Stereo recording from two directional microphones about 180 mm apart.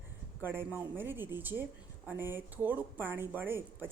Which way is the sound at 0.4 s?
10° right (ahead or behind).